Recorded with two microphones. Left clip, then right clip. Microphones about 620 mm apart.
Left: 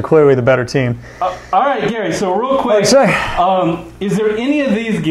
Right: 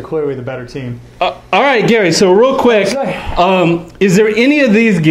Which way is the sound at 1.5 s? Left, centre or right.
Right.